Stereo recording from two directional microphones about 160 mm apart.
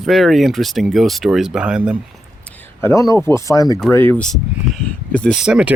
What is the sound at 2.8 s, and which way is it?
Speech, 20° left (ahead or behind).